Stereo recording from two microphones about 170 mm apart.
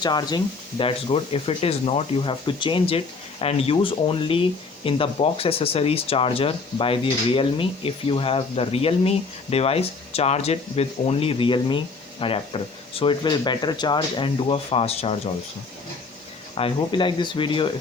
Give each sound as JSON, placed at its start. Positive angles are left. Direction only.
{"t": 0.0, "sound": "speech", "side_deg": 25}
{"t": 16.6, "sound": "speech", "side_deg": 30}